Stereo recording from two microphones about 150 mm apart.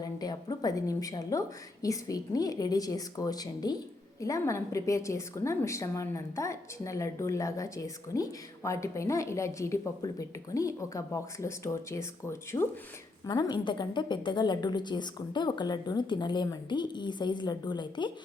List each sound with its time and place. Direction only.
0.0 s a woman's voice: 25° left (ahead or behind)
13.2 s a woman's voice: 30° left (ahead or behind)